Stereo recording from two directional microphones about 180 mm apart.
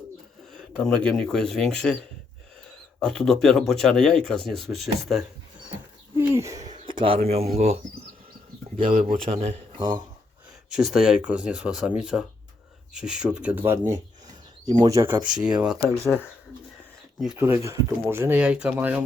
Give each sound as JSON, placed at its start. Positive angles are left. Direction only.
{"t": 0.5, "sound": "speech", "side_deg": 5}
{"t": 3.0, "sound": "speech", "side_deg": 0}
{"t": 6.1, "sound": "owl", "side_deg": -15}
{"t": 7.0, "sound": "speech", "side_deg": -30}
{"t": 9.0, "sound": "speech", "side_deg": -30}
{"t": 10.7, "sound": "speech", "side_deg": 0}
{"t": 15.5, "sound": "speech", "side_deg": -5}
{"t": 17.3, "sound": "speech", "side_deg": -15}